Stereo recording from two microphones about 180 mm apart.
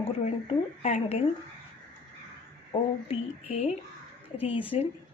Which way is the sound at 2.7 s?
35° left (ahead or behind).